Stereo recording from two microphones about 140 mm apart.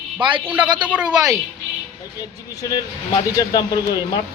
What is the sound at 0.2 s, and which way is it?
Speech, 35° right (ahead or behind).